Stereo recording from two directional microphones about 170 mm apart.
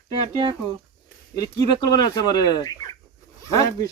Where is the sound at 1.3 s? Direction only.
20° left (ahead or behind).